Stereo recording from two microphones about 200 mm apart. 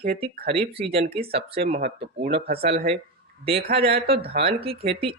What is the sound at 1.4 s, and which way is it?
Speech, 30° right (ahead or behind).